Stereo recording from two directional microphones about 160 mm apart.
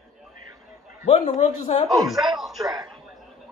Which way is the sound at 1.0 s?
45° left (ahead or behind).